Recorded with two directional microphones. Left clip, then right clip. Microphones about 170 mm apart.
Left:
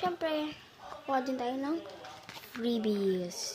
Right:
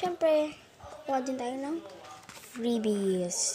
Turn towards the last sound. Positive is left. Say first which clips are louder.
# right 5 dB
turn(degrees=-10)  # may be behind; listen again after turning